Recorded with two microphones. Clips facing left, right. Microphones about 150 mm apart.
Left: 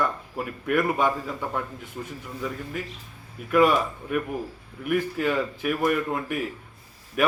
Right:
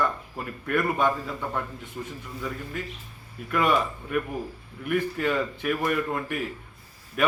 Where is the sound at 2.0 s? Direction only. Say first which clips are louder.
Even; 20° left (ahead or behind).